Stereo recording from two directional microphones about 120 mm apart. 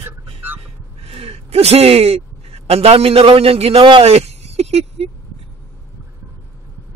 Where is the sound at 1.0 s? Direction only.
55° right (ahead or behind).